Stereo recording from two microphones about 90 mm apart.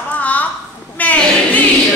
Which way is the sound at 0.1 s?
15° left (ahead or behind).